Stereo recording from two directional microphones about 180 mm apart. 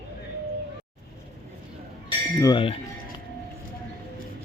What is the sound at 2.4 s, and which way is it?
Speech, 25° left (ahead or behind).